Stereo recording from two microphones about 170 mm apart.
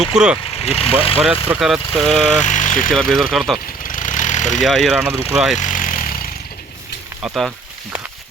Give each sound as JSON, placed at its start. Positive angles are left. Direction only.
{"t": 0.0, "sound": "speech", "side_deg": -5}
{"t": 0.5, "sound": "speech", "side_deg": 35}
{"t": 1.5, "sound": "speech", "side_deg": -5}
{"t": 2.4, "sound": "speech", "side_deg": 45}
{"t": 2.9, "sound": "speech", "side_deg": 0}
{"t": 3.8, "sound": "a sound", "side_deg": 50}
{"t": 4.6, "sound": "speech", "side_deg": 0}
{"t": 5.5, "sound": "vehicle", "side_deg": 50}